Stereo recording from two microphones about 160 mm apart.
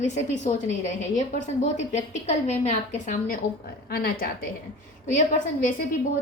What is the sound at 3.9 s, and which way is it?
Speech, 70° left (ahead or behind).